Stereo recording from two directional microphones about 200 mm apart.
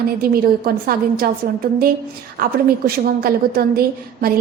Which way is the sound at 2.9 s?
50° right (ahead or behind).